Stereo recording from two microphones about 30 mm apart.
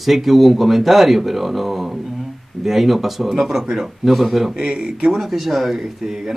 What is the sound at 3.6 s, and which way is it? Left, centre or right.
Speech, centre.